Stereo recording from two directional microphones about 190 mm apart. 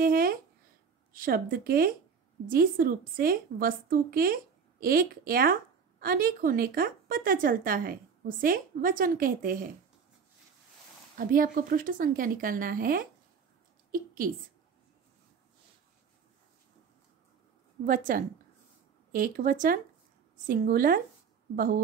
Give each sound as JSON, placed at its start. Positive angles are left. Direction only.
{"t": 0.0, "sound": "a woman's voice", "side_deg": -50}
{"t": 11.1, "sound": "a woman's voice", "side_deg": -45}
{"t": 17.8, "sound": "a woman's voice", "side_deg": -45}